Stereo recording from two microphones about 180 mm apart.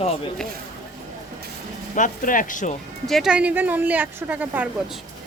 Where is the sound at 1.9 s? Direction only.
45° left (ahead or behind).